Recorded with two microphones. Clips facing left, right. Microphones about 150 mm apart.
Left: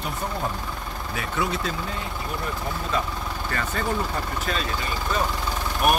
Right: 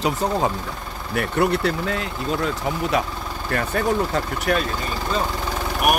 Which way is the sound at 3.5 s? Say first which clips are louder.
Right 6 dB; 70° right (ahead or behind).